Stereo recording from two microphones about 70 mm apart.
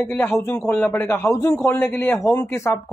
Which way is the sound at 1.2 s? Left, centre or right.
Left.